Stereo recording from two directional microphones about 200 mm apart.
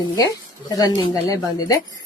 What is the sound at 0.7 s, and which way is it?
A woman's voice, 20° left (ahead or behind).